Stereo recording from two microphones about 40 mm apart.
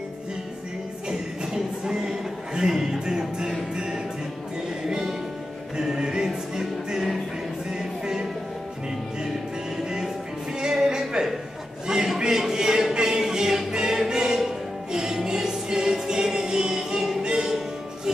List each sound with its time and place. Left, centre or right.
1.0 s a sound: centre
3.7 s music: centre
9.8 s music: centre
11.9 s a sound: centre
12.9 s choir: centre
14.9 s music: centre